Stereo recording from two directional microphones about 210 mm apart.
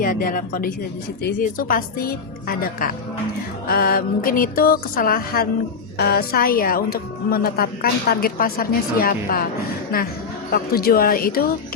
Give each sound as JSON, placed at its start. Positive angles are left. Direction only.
{"t": 0.0, "sound": "a woman's voice", "side_deg": 40}